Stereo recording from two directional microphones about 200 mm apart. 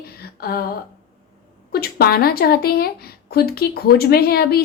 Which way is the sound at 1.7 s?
50° left (ahead or behind).